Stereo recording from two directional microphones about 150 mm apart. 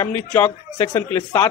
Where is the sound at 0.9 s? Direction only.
15° left (ahead or behind).